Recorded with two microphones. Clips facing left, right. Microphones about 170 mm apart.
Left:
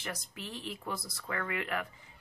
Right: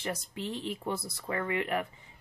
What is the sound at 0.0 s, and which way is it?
A woman's voice, 25° right (ahead or behind).